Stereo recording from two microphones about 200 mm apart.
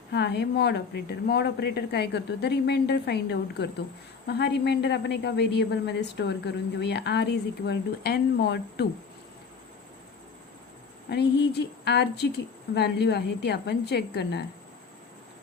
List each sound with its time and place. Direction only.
0.1 s a woman's voice: 55° left (ahead or behind)
11.1 s a woman's voice: 55° left (ahead or behind)